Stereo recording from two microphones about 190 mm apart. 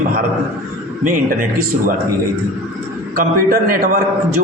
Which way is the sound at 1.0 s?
45° right (ahead or behind).